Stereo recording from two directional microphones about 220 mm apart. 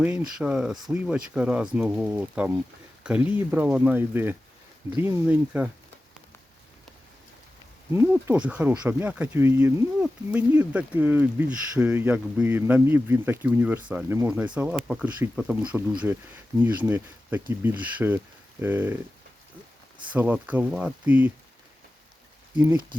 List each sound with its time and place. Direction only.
0.0 s speech: 5° right (ahead or behind)
7.9 s speech: 10° right (ahead or behind)
20.1 s speech: 5° right (ahead or behind)
22.5 s speech: 15° right (ahead or behind)